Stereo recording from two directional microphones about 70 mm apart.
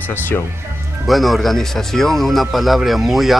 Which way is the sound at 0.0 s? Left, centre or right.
Left.